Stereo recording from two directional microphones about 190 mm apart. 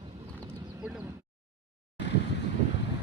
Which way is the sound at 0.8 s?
5° right (ahead or behind).